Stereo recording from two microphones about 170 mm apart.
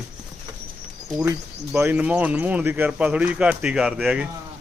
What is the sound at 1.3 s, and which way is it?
A man's voice, 10° right (ahead or behind).